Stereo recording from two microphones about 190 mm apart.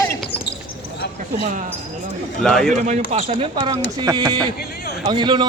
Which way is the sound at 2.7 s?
40° right (ahead or behind).